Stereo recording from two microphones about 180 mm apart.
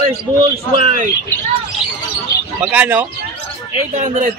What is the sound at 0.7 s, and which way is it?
Speech, 40° right (ahead or behind).